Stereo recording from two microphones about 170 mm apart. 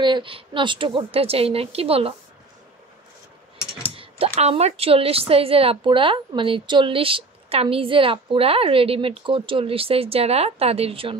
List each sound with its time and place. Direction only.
0.0 s a woman's voice: 30° right (ahead or behind)
3.9 s typing: 35° right (ahead or behind)
4.4 s a woman's voice: 40° right (ahead or behind)